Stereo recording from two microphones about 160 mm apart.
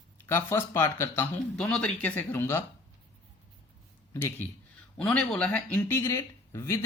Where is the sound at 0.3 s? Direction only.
15° left (ahead or behind).